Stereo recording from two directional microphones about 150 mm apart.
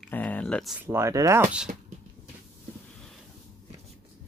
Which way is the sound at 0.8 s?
15° right (ahead or behind).